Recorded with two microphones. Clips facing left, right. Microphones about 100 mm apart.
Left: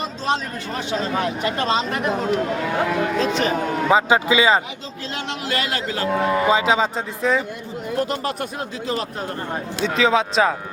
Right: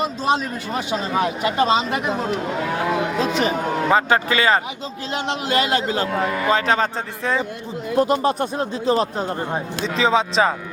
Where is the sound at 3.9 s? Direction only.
10° left (ahead or behind).